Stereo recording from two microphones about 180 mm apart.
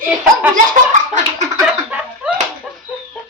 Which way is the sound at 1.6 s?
5° right (ahead or behind).